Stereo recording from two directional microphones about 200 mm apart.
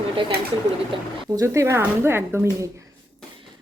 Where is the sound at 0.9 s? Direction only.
25° right (ahead or behind).